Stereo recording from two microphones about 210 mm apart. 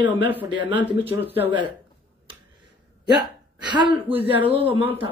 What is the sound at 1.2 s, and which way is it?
Speech, 10° right (ahead or behind).